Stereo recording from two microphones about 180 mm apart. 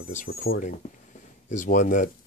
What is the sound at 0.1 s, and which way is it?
Speech, 50° left (ahead or behind).